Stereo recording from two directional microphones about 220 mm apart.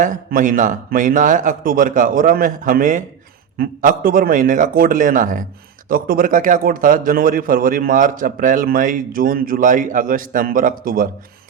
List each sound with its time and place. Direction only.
0.0 s a man's voice: 35° right (ahead or behind)